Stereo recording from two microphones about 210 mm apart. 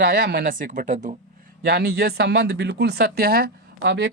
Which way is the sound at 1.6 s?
50° right (ahead or behind).